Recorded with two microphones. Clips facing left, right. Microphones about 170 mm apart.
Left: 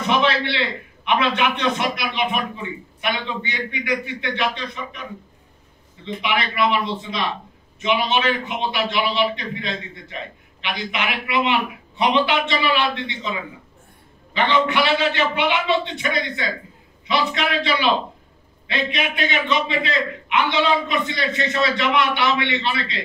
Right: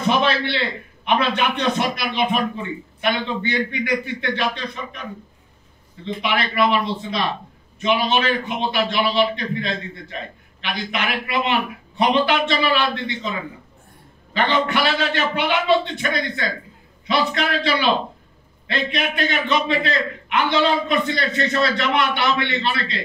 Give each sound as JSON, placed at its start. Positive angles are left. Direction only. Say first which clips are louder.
{"t": 0.0, "sound": "a sound", "louder": "right 1 dB", "side_deg": -35}
{"t": 1.0, "sound": "a man's voice", "louder": "even", "side_deg": -40}
{"t": 6.2, "sound": "a man's voice", "louder": "right 1 dB", "side_deg": -40}
{"t": 14.3, "sound": "a man's voice", "louder": "left 1 dB", "side_deg": -40}